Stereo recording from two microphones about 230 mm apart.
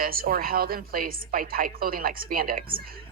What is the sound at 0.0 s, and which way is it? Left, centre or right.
Speech, right.